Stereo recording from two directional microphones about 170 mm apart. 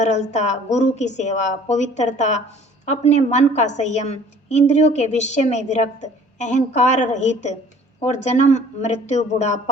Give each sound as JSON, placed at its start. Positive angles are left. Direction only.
{"t": 0.0, "sound": "a woman's voice", "side_deg": 45}